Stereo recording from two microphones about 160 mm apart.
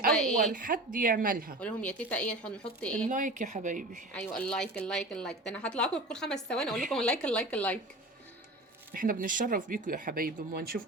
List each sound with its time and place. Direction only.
0.1 s a sound: 5° left (ahead or behind)
0.5 s speech: 60° right (ahead or behind)
1.6 s speech: 10° left (ahead or behind)
3.1 s speech: 55° right (ahead or behind)
4.1 s a woman's voice: 5° left (ahead or behind)
8.9 s speech: 60° right (ahead or behind)